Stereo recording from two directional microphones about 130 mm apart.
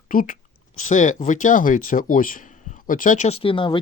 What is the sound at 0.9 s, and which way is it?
Speech, 70° left (ahead or behind).